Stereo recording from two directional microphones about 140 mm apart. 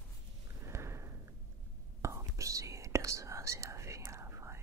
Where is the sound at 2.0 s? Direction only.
20° right (ahead or behind).